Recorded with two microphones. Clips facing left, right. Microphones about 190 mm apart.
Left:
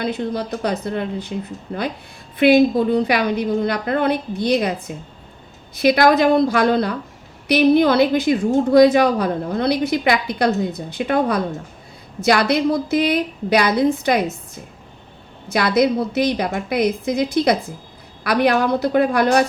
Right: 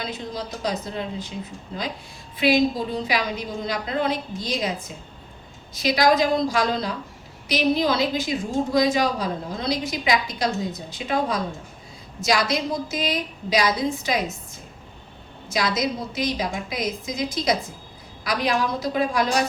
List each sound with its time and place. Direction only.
0.0 s a woman's voice: 60° left (ahead or behind)
5.7 s a woman's voice: 60° left (ahead or behind)
15.4 s a woman's voice: 60° left (ahead or behind)